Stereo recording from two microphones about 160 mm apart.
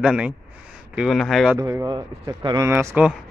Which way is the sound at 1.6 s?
20° right (ahead or behind).